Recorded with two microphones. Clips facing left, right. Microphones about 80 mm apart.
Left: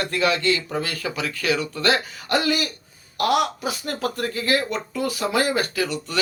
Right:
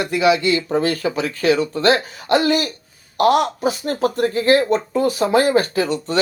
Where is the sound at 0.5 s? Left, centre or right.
Right.